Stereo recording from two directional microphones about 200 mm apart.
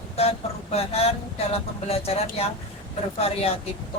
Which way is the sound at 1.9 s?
30° left (ahead or behind).